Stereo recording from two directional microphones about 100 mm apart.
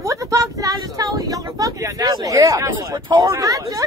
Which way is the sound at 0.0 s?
35° right (ahead or behind).